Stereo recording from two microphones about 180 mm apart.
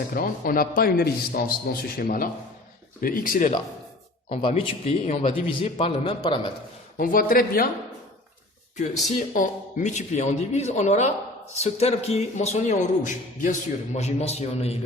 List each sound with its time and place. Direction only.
0.1 s a man's voice: 50° left (ahead or behind)
4.3 s a man's voice: 30° left (ahead or behind)
6.9 s a man's voice: 50° left (ahead or behind)
9.1 s a man's voice: 45° left (ahead or behind)